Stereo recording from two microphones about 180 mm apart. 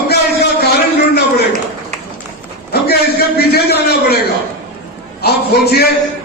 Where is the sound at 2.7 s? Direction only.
60° left (ahead or behind).